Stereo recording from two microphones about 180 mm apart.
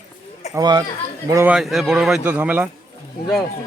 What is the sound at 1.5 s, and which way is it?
Speech, centre (ahead or behind).